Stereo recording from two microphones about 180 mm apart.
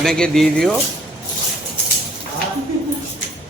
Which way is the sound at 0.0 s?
5° left (ahead or behind).